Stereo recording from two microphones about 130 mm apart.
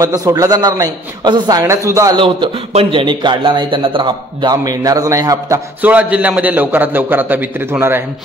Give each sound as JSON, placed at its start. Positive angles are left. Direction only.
{"t": 0.0, "sound": "speech", "side_deg": -30}
{"t": 2.1, "sound": "speech", "side_deg": -45}
{"t": 5.8, "sound": "a man's voice", "side_deg": -10}